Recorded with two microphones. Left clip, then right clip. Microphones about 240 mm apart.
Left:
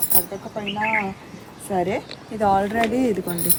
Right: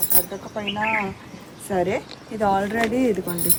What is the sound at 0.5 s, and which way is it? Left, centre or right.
Speech, centre.